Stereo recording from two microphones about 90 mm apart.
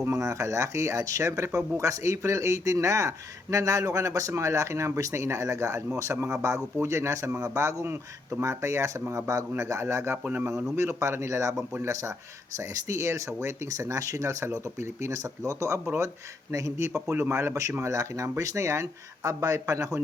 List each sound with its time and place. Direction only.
0.0 s a man's voice: 35° right (ahead or behind)